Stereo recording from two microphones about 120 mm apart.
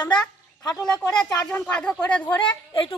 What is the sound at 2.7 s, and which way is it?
Speech, 45° left (ahead or behind).